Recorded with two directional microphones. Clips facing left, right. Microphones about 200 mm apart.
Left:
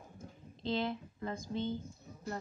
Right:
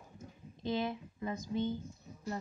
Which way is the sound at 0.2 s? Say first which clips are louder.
Right 2 dB; 15° right (ahead or behind).